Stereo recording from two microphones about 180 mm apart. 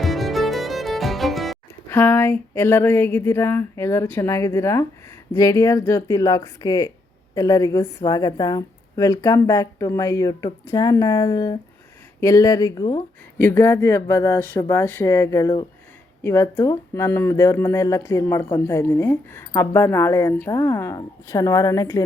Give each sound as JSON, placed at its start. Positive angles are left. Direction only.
{"t": 0.0, "sound": "music", "side_deg": 0}
{"t": 1.9, "sound": "a woman's voice", "side_deg": 10}